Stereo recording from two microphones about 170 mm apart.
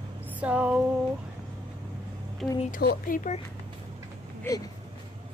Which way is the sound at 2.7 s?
55° left (ahead or behind).